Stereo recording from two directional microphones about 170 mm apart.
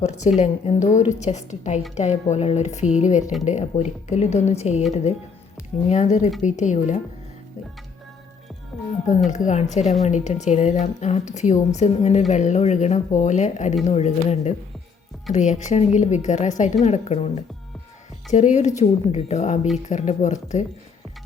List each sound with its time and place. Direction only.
0.0 s a woman's voice: 40° left (ahead or behind)
5.9 s speech: 45° left (ahead or behind)
9.3 s a woman's voice: 45° left (ahead or behind)